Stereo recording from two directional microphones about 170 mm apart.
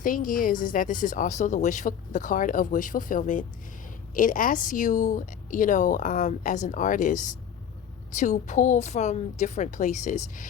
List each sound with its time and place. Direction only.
0.0 s speech: 55° left (ahead or behind)